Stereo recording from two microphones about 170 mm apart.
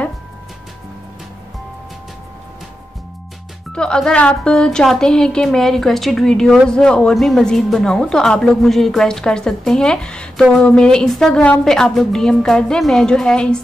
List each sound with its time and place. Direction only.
3.7 s speech: 5° left (ahead or behind)